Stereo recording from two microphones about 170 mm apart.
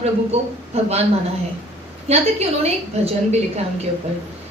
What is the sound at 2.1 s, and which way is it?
A woman's voice, 40° right (ahead or behind).